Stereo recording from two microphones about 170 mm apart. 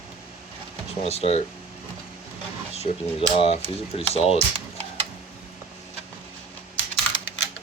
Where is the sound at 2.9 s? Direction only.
40° left (ahead or behind).